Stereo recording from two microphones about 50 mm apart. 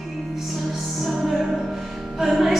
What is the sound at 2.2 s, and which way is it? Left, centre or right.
Music, centre.